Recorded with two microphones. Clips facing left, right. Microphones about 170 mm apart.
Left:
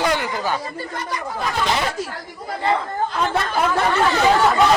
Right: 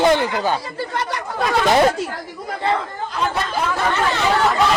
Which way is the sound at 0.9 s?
75° right (ahead or behind).